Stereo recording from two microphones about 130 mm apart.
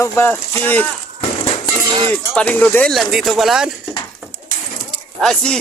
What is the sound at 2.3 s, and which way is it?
Speech, 10° left (ahead or behind).